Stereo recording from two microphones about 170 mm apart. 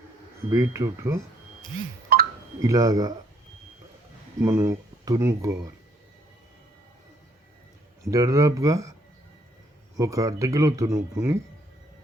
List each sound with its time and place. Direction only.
0.5 s speech: 15° right (ahead or behind)
2.1 s telephone dialing: 65° right (ahead or behind)
2.6 s speech: 20° right (ahead or behind)
4.4 s speech: 15° right (ahead or behind)
8.0 s speech: 20° right (ahead or behind)
10.0 s speech: 20° right (ahead or behind)